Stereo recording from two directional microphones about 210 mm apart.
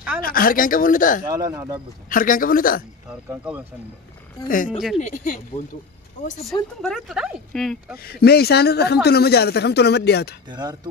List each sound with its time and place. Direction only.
0.2 s speech: 45° left (ahead or behind)
1.2 s speech: 15° right (ahead or behind)
2.0 s speech: 40° left (ahead or behind)
3.1 s speech: 5° right (ahead or behind)
4.6 s speech: centre (ahead or behind)
4.9 s speech: 35° left (ahead or behind)
6.8 s speech: centre (ahead or behind)
8.0 s speech: 45° left (ahead or behind)
10.5 s speech: 20° right (ahead or behind)